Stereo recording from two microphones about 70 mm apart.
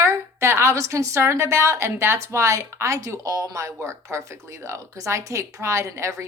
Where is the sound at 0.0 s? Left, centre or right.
Right.